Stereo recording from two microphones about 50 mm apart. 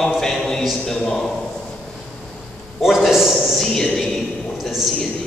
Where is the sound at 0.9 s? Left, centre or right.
Centre.